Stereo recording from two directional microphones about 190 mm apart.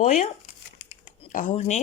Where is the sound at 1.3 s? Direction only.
45° left (ahead or behind).